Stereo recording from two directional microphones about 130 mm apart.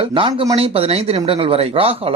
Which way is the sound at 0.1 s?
40° right (ahead or behind).